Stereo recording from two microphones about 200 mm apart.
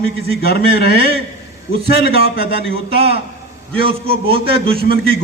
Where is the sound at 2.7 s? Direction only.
30° right (ahead or behind).